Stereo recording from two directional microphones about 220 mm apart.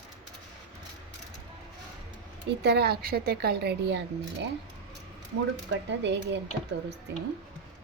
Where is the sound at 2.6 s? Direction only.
50° right (ahead or behind).